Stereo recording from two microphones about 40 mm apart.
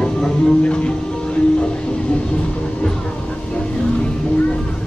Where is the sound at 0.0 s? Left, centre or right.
Centre.